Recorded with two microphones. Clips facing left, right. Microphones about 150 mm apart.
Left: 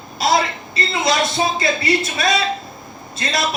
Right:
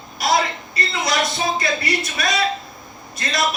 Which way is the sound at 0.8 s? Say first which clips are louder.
Left 3 dB; 25° left (ahead or behind).